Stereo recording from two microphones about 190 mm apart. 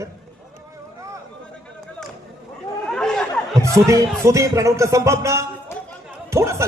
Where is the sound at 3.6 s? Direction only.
15° right (ahead or behind).